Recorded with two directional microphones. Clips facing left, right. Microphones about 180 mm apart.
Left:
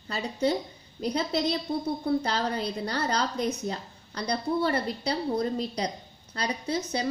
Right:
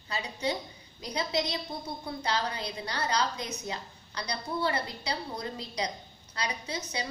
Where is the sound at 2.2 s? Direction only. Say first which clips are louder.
Left 3 dB; 50° left (ahead or behind).